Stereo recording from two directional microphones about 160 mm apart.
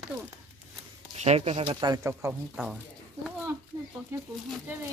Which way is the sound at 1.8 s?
20° right (ahead or behind).